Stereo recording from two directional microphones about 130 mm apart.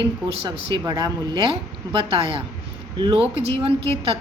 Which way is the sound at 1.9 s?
45° right (ahead or behind).